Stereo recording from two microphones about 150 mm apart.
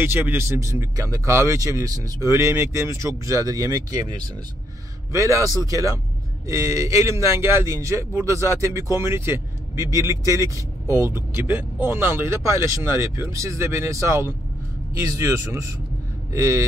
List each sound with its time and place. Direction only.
0.0 s a man's voice: 15° right (ahead or behind)